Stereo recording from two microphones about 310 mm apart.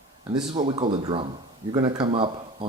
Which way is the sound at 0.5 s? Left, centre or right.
Centre.